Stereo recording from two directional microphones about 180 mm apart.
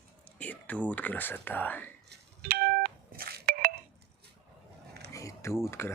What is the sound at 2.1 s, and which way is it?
Telephone dialing, 55° right (ahead or behind).